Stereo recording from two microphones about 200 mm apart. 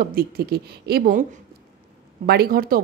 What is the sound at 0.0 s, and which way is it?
Speech, 50° right (ahead or behind).